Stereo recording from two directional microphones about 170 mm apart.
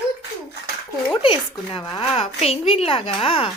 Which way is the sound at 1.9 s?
35° left (ahead or behind).